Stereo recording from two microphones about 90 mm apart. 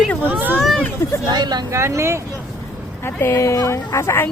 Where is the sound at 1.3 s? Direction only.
50° right (ahead or behind).